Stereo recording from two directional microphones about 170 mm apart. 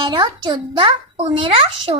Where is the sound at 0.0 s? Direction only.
25° right (ahead or behind).